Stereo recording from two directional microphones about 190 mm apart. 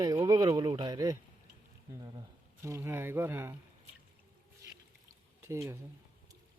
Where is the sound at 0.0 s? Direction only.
20° right (ahead or behind).